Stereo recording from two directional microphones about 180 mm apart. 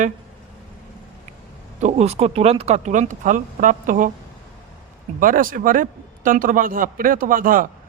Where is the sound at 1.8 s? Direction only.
35° right (ahead or behind).